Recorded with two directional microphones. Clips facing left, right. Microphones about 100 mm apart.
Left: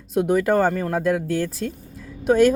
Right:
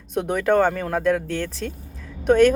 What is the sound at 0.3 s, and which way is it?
Speech, 5° left (ahead or behind).